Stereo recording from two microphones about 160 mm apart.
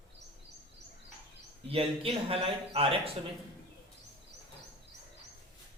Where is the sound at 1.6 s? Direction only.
35° right (ahead or behind).